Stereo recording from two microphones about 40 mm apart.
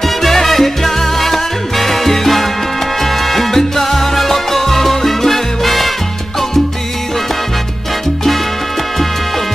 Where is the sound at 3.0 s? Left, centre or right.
Centre.